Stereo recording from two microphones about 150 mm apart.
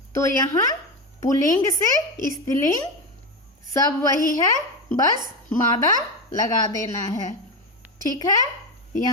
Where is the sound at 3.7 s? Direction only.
20° left (ahead or behind).